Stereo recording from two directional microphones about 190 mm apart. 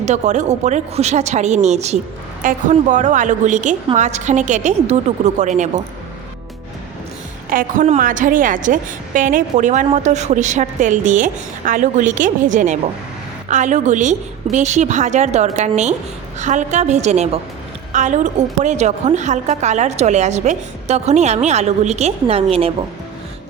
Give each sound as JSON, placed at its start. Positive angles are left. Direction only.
{"t": 0.0, "sound": "a woman's voice", "side_deg": -40}
{"t": 7.5, "sound": "a woman's voice", "side_deg": -45}